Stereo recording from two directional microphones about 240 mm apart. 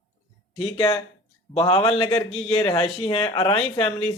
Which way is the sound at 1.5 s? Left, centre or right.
Left.